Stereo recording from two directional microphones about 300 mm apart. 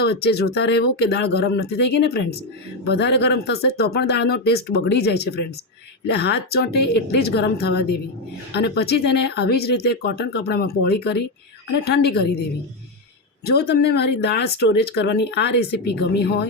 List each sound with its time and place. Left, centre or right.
0.0 s speech: left